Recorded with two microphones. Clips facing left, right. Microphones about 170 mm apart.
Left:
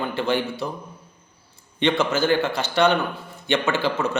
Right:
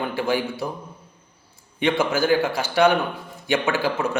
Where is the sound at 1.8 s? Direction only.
10° right (ahead or behind).